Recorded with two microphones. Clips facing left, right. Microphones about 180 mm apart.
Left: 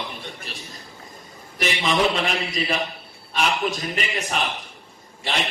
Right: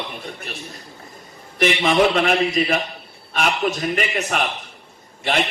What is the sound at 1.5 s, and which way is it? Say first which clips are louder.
A man's voice: right 5 dB; 55° right (ahead or behind).